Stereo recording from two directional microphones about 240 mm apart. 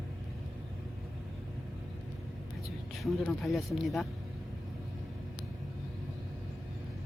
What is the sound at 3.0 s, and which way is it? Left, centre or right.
Speech, centre.